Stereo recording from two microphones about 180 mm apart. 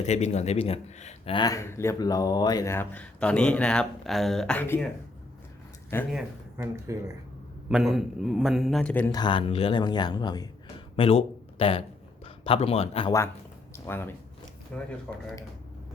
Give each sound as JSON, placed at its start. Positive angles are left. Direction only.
{"t": 0.0, "sound": "speech", "side_deg": 40}
{"t": 5.9, "sound": "speech", "side_deg": 10}
{"t": 6.6, "sound": "speech", "side_deg": -15}
{"t": 7.7, "sound": "a man's voice", "side_deg": -5}
{"t": 9.1, "sound": "speech", "side_deg": 25}
{"t": 13.7, "sound": "a man's voice", "side_deg": 15}